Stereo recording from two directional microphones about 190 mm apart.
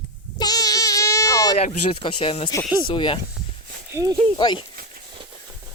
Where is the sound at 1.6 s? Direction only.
35° left (ahead or behind).